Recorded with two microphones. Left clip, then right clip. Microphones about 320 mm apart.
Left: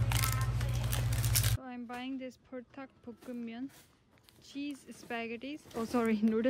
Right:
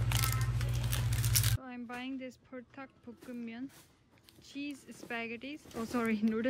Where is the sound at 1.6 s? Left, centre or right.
Centre.